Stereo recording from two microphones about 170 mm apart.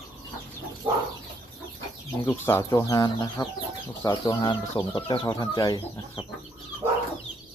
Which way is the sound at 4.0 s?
25° left (ahead or behind).